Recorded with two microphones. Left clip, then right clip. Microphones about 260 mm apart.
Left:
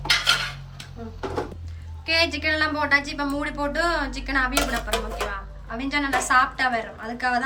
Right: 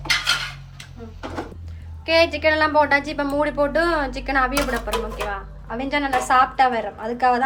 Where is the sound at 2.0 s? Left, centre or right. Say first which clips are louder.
Right 5 dB; centre.